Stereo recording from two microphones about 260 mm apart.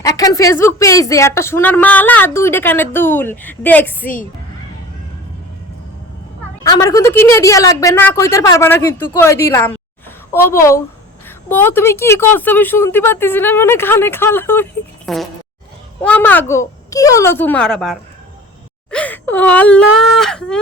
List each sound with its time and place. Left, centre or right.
0.0 s speech: centre
6.6 s speech: centre